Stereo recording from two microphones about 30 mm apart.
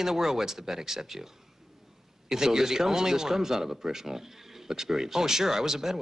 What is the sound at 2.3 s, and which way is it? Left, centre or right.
A man's voice, centre.